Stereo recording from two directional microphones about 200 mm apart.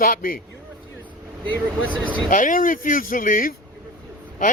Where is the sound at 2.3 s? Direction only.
40° left (ahead or behind).